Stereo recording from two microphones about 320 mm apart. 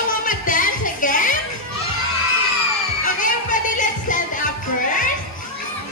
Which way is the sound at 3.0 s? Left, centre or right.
Left.